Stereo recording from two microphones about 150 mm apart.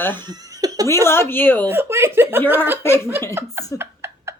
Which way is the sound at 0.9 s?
15° left (ahead or behind).